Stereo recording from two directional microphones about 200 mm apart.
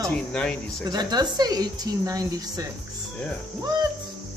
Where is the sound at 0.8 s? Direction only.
20° right (ahead or behind).